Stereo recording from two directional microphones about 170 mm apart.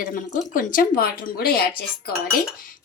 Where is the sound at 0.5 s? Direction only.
55° left (ahead or behind).